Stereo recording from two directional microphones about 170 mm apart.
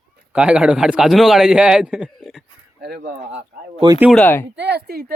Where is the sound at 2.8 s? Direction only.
65° right (ahead or behind).